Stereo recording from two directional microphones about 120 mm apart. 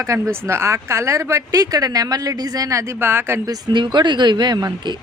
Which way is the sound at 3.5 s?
40° right (ahead or behind).